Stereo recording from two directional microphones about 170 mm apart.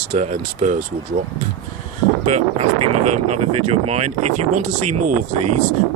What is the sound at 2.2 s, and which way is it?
Speech, 40° right (ahead or behind).